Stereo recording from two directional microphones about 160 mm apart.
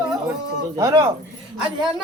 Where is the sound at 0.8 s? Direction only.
20° right (ahead or behind).